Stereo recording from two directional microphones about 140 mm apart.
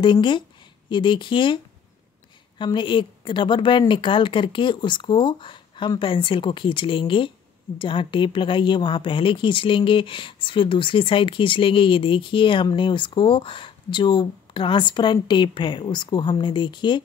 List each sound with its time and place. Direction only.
0.0 s speech: 35° left (ahead or behind)
2.6 s speech: 35° left (ahead or behind)